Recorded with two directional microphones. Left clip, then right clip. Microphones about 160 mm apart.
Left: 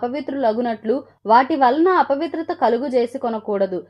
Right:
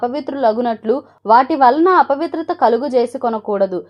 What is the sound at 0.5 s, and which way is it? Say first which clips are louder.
A woman's voice: right 4 dB; 25° right (ahead or behind).